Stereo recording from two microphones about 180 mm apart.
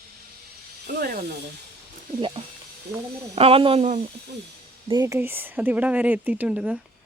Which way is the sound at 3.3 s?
30° right (ahead or behind).